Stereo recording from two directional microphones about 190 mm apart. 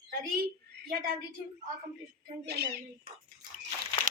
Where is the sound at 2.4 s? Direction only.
60° right (ahead or behind).